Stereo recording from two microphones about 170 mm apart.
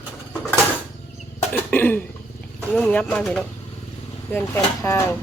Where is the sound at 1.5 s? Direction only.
10° left (ahead or behind).